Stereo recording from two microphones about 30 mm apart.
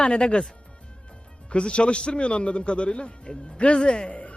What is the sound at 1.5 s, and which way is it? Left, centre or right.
Speech, left.